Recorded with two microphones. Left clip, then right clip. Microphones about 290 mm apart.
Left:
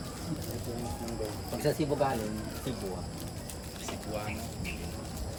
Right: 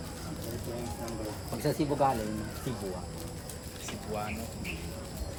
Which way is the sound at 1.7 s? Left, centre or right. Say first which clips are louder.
Left 1 dB; centre.